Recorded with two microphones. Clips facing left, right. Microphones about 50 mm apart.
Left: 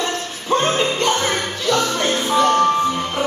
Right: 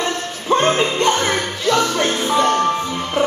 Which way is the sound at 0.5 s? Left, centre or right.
Right.